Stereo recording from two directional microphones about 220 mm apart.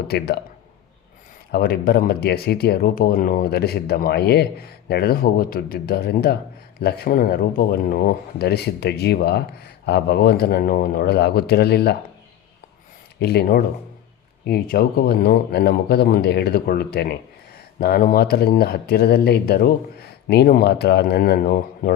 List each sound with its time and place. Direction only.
1.5 s speech: 45° left (ahead or behind)
13.1 s speech: 45° left (ahead or behind)